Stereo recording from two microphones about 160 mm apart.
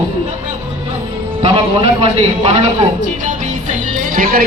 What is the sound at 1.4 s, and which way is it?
A man's voice, 30° right (ahead or behind).